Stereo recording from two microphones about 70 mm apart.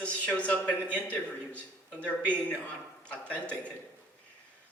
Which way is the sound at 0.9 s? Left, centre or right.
Centre.